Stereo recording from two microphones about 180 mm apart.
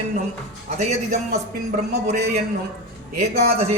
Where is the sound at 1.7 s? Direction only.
60° right (ahead or behind).